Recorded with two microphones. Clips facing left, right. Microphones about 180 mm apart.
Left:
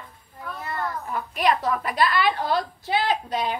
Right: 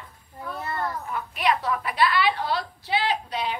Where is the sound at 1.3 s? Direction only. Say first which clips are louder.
Left 2 dB; 40° left (ahead or behind).